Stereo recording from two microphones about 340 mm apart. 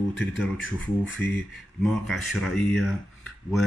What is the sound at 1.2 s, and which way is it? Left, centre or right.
Speech, left.